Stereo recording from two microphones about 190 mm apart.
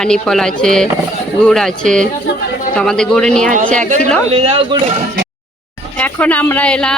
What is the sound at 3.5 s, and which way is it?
Speech, 40° right (ahead or behind).